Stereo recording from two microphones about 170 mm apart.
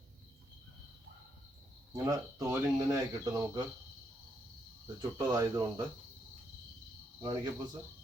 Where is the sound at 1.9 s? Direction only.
20° right (ahead or behind).